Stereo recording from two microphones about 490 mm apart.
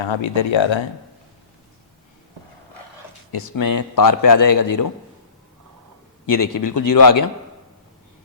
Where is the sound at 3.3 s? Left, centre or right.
Left.